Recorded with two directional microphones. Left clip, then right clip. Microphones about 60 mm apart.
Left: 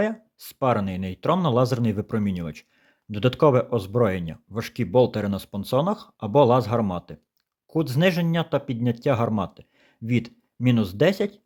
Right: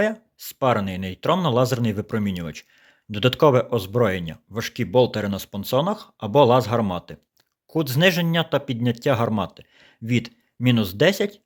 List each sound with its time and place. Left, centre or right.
0.6 s speech: left
6.2 s speech: left